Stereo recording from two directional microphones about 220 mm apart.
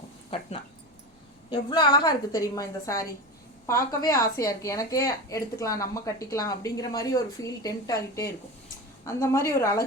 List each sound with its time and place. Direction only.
1.5 s a woman's voice: 20° left (ahead or behind)